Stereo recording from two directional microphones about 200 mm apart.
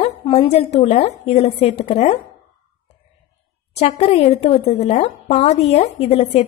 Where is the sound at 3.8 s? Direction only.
30° left (ahead or behind).